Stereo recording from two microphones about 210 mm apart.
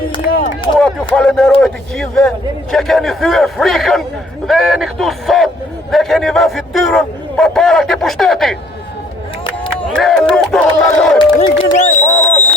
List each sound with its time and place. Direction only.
0.8 s a man's voice: 5° left (ahead or behind)
9.9 s a man's voice: centre (ahead or behind)
11.2 s speech: 20° left (ahead or behind)
11.7 s a sound: 35° left (ahead or behind)